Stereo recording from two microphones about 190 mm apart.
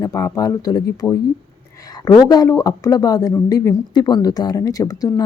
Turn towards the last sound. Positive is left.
turn(degrees=20)  # may be behind; listen again after turning